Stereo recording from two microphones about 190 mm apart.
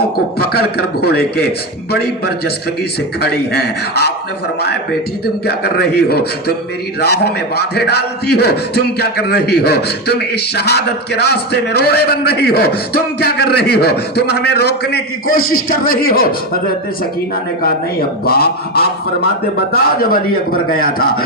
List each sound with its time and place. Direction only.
0.3 s speech: 55° left (ahead or behind); by 15.6 s 90° left
15.7 s a man's voice: 50° left (ahead or behind)
18.3 s a man's voice: 55° left (ahead or behind)